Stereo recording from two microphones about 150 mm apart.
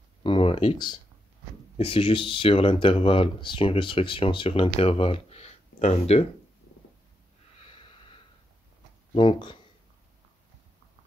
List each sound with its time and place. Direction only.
0.2 s speech: 35° left (ahead or behind)
7.5 s wheeze: 35° left (ahead or behind)
9.1 s speech: 35° left (ahead or behind)